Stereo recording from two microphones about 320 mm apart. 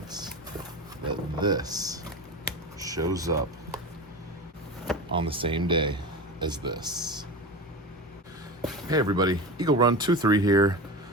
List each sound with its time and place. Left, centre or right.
1.0 s a sound: centre
2.7 s speech: centre
5.1 s speech: centre
8.9 s speech: centre